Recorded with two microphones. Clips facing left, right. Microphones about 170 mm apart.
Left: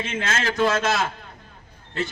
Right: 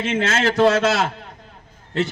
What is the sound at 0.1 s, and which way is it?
Speech, 40° right (ahead or behind).